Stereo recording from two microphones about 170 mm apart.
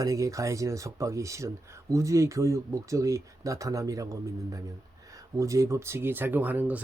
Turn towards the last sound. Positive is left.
turn(degrees=-10)  # may be behind; listen again after turning